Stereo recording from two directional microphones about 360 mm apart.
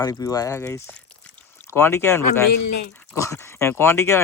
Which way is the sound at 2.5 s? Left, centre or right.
Left.